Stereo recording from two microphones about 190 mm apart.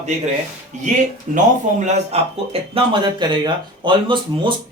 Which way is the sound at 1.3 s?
40° right (ahead or behind).